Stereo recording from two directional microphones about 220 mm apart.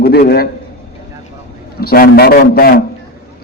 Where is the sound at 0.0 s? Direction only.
45° left (ahead or behind).